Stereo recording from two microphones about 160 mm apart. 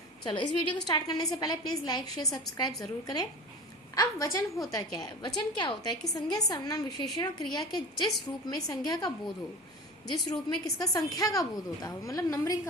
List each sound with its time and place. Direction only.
0.3 s a woman's voice: 30° left (ahead or behind)